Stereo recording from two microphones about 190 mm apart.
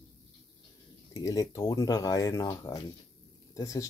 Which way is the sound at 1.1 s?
20° left (ahead or behind).